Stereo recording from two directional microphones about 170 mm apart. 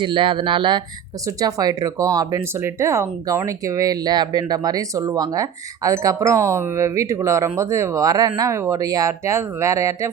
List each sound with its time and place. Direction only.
0.0 s speech: 30° right (ahead or behind)